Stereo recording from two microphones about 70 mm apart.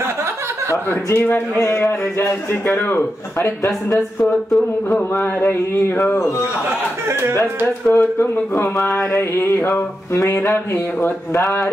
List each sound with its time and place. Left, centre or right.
1.1 s speech: left
5.1 s a sound: left
7.9 s speech: left